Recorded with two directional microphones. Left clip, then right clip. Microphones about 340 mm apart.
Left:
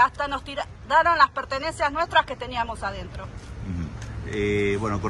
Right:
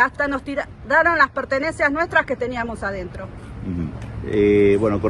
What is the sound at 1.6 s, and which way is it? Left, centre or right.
Speech, centre.